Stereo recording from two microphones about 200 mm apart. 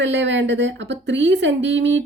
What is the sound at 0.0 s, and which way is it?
Speech, 65° right (ahead or behind).